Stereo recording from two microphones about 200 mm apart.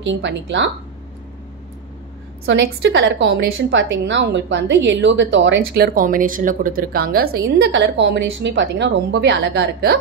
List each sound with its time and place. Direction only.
0.0 s a woman's voice: 65° right (ahead or behind)
2.4 s a woman's voice: 65° right (ahead or behind)
5.9 s a woman's voice: 45° right (ahead or behind)